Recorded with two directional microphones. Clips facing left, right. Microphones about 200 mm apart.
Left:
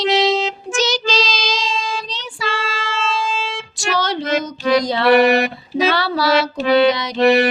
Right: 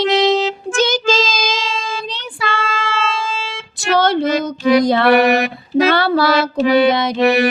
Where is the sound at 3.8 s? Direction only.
55° right (ahead or behind).